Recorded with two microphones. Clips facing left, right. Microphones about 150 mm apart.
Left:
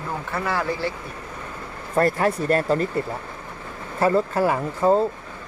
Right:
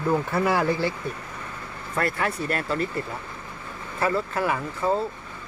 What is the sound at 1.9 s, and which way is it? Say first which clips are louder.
Speech: left 6 dB; 35° left (ahead or behind).